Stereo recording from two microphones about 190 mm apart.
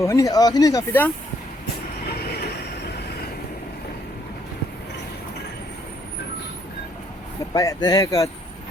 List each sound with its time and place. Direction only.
0.0 s speech: 15° left (ahead or behind)
7.5 s speech: 20° left (ahead or behind)